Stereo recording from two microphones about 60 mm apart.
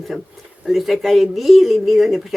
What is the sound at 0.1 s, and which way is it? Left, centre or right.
Speech, centre.